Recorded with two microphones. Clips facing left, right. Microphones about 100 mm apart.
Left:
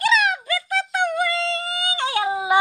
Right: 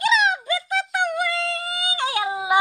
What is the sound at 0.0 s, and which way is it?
Music, 20° right (ahead or behind).